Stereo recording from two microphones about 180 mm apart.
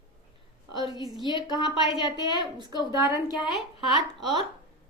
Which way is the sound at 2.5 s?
20° right (ahead or behind).